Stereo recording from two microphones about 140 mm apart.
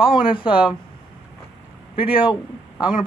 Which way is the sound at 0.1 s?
35° left (ahead or behind).